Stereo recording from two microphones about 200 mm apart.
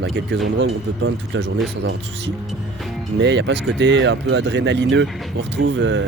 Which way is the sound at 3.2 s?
60° right (ahead or behind).